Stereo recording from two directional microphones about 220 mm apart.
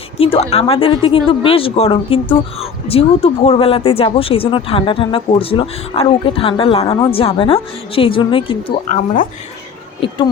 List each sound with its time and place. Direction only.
0.2 s speech: 25° left (ahead or behind)
8.9 s speech: 35° left (ahead or behind)